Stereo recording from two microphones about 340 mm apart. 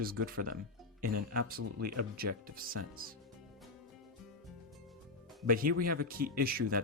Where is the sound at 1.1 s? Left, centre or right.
Right.